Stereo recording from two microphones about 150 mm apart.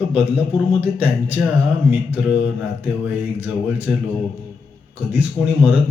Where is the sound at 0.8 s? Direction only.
10° right (ahead or behind).